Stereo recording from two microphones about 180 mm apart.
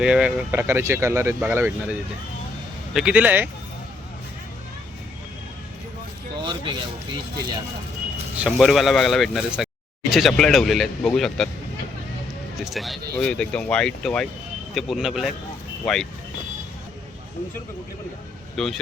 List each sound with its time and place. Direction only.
0.0 s speech: 5° right (ahead or behind)
6.4 s speech: 25° right (ahead or behind)
8.4 s speech: centre (ahead or behind)
12.5 s speech: centre (ahead or behind)
18.5 s speech: centre (ahead or behind)